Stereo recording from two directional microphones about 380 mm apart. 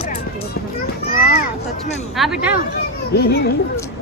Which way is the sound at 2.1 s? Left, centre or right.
Centre.